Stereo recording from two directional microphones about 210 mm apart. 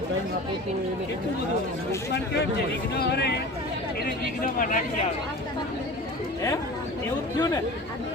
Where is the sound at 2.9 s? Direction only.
50° left (ahead or behind).